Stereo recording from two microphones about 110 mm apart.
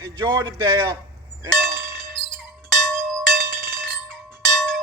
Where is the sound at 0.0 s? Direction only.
40° right (ahead or behind).